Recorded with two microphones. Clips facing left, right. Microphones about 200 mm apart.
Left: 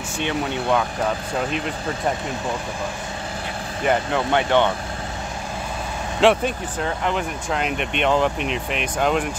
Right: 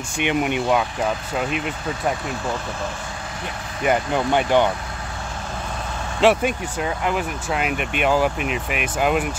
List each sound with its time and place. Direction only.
0.2 s speech: 15° right (ahead or behind)
3.8 s speech: 10° right (ahead or behind)
6.2 s speech: 10° right (ahead or behind)